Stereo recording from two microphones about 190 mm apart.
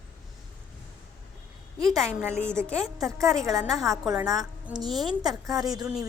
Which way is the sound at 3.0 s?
15° right (ahead or behind).